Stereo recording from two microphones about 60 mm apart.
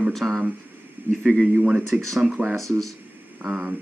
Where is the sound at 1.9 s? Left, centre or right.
Right.